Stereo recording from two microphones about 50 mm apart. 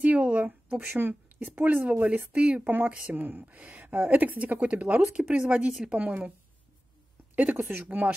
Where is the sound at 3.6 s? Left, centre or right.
Centre.